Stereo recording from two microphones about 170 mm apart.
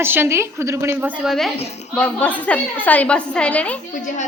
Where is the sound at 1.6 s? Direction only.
40° left (ahead or behind).